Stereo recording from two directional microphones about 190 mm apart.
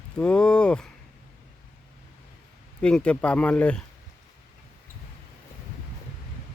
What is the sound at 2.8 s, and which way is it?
Speech, 5° left (ahead or behind).